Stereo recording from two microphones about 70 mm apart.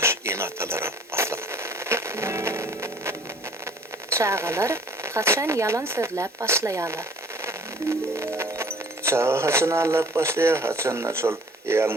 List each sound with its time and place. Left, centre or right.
0.0 s a sound: right
4.1 s speech: right
7.4 s music: right
9.0 s speech: right